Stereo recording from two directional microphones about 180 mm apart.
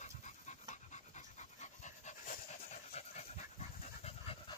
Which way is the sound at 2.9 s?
35° left (ahead or behind).